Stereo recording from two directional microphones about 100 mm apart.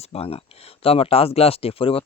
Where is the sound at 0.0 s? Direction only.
85° left.